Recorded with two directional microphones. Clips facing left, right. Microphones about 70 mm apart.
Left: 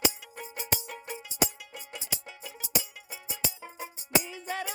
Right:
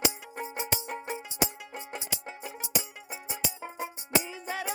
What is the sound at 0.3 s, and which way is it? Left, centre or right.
Music, right.